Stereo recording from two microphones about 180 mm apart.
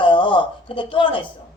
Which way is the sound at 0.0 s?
25° left (ahead or behind).